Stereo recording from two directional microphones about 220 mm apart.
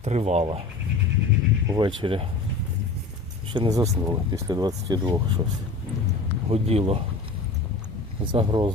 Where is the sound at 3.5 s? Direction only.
20° right (ahead or behind).